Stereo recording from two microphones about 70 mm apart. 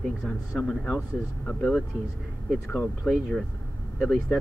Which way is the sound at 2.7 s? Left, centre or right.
Left.